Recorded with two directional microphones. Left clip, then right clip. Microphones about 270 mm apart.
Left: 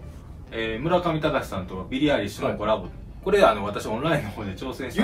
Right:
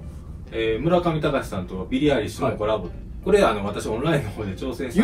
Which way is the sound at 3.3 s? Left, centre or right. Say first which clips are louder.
Even; centre.